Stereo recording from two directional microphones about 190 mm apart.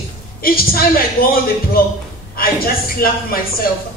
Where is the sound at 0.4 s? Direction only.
50° left (ahead or behind).